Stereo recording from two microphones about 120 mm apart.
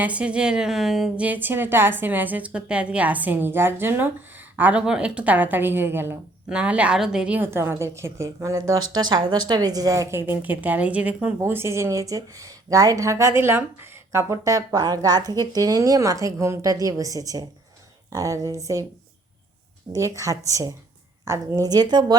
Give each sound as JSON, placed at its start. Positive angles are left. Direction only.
{"t": 0.0, "sound": "a woman's voice", "side_deg": -10}
{"t": 19.9, "sound": "speech", "side_deg": -25}